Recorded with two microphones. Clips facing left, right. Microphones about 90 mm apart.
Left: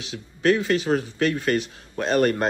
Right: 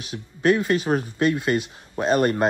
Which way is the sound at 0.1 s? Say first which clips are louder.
Right 1 dB; 30° right (ahead or behind).